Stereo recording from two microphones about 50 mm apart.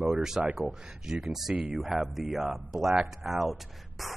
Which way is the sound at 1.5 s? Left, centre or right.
Right.